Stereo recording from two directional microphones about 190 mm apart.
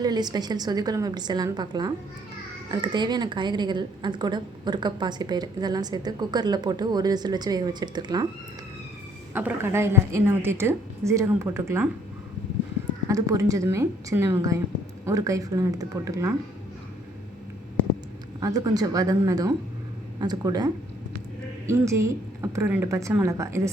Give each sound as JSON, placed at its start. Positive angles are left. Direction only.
{"t": 0.0, "sound": "a woman's voice", "side_deg": -20}
{"t": 9.3, "sound": "a woman's voice", "side_deg": -10}
{"t": 13.1, "sound": "a woman's voice", "side_deg": -15}
{"t": 18.3, "sound": "a woman's voice", "side_deg": -20}
{"t": 21.7, "sound": "a woman's voice", "side_deg": -15}